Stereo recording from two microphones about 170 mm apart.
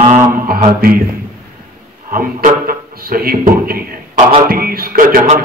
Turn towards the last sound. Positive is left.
turn(degrees=-55)  # may be behind; listen again after turning